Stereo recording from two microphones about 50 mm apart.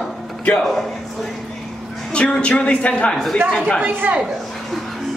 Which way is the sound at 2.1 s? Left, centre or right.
Left.